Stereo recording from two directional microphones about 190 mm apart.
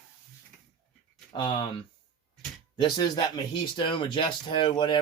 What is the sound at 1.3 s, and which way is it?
Speech, 25° left (ahead or behind).